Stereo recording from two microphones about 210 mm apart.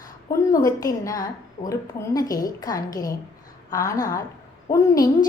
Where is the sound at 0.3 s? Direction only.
15° left (ahead or behind).